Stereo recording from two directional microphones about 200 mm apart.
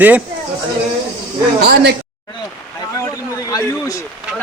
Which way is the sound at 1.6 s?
55° right (ahead or behind).